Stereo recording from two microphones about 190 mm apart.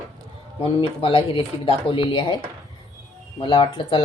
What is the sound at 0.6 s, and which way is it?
Speech, 30° left (ahead or behind).